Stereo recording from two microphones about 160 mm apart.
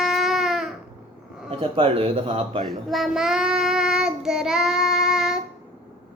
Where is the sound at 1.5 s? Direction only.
35° right (ahead or behind).